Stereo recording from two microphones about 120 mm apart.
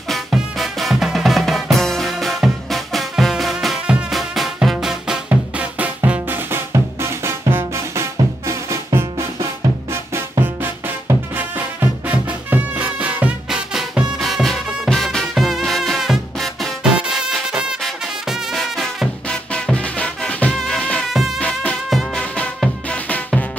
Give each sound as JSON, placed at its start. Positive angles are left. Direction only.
{"t": 0.1, "sound": "music", "side_deg": 0}
{"t": 10.4, "sound": "music", "side_deg": -15}